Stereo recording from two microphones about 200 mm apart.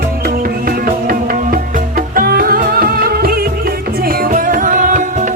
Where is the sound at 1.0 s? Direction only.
45° right (ahead or behind).